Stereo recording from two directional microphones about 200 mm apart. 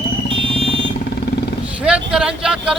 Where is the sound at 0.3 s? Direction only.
30° right (ahead or behind).